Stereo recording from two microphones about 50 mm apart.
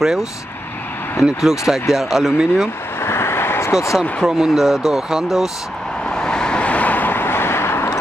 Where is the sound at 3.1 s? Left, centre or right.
Left.